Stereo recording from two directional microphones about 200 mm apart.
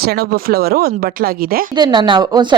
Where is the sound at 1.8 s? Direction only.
25° right (ahead or behind).